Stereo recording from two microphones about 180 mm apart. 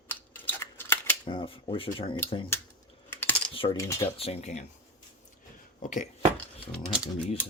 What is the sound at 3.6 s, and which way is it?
Speech, 25° left (ahead or behind).